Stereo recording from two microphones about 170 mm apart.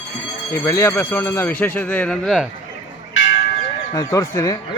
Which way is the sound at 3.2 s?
90° left.